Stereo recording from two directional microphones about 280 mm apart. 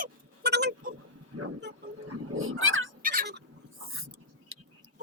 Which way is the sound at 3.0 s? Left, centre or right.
Right.